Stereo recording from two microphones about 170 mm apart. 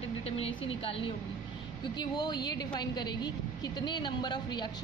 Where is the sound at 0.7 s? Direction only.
30° left (ahead or behind).